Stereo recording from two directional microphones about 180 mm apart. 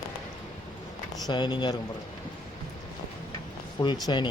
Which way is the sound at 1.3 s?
25° left (ahead or behind).